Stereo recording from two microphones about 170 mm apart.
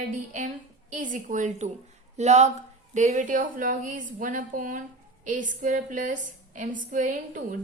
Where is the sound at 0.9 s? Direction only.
50° right (ahead or behind).